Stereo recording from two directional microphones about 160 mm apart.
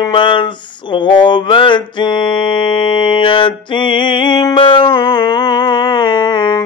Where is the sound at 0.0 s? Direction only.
30° left (ahead or behind).